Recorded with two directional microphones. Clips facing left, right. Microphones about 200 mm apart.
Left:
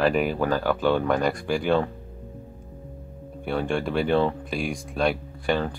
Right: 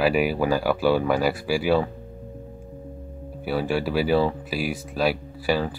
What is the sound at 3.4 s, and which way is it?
Speech, 5° right (ahead or behind).